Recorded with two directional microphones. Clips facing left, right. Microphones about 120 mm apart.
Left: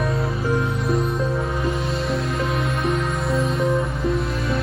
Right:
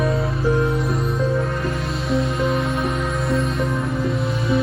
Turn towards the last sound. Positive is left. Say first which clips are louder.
# right 2 dB
turn(degrees=0)  # may be behind; listen again after turning